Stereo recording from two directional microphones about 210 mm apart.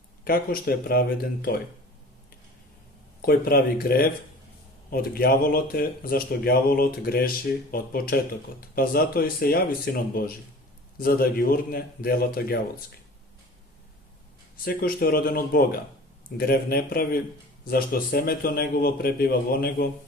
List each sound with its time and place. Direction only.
0.3 s speech: 45° left (ahead or behind)
3.2 s speech: 45° left (ahead or behind)
14.6 s speech: 45° left (ahead or behind)